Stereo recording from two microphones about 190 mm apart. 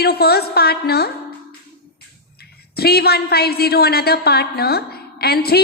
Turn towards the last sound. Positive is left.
turn(degrees=55)  # may be behind; listen again after turning